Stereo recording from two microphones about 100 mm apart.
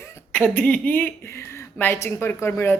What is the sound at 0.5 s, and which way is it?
Speech, 15° left (ahead or behind).